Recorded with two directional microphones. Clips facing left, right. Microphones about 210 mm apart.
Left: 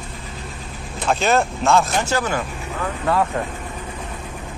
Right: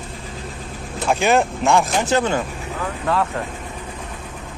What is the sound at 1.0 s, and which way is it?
Speech, 15° right (ahead or behind).